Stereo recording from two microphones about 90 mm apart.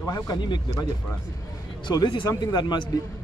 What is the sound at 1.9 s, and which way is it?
Speech, 60° left (ahead or behind).